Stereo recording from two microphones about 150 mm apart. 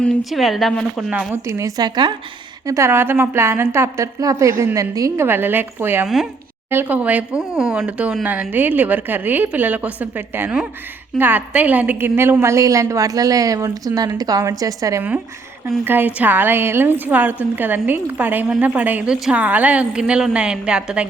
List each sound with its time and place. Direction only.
0.0 s speech: centre (ahead or behind)
1.3 s a woman's voice: 20° right (ahead or behind)
2.6 s a woman's voice: 20° right (ahead or behind)